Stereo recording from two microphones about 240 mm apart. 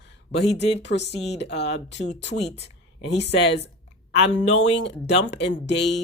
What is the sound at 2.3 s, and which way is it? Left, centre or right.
Speech, left.